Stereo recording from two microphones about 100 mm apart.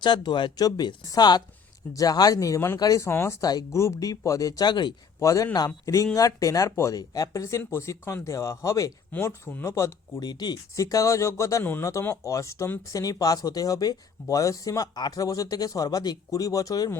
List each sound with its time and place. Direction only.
0.0 s speech: 50° left (ahead or behind)
5.2 s speech: 35° left (ahead or behind)
11.6 s speech: 20° left (ahead or behind)
11.9 s speech: 30° left (ahead or behind)
12.9 s speech: 35° left (ahead or behind)